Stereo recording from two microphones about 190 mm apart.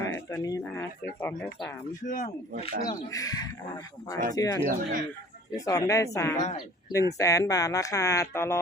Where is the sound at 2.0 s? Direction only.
45° left (ahead or behind).